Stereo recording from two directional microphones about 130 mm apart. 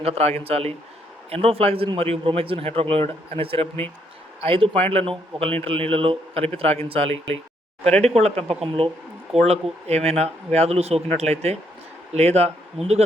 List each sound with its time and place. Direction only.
0.0 s a man's voice: 55° right (ahead or behind)